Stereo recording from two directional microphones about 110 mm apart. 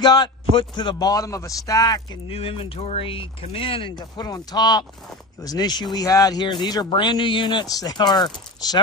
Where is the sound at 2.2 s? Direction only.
55° left (ahead or behind).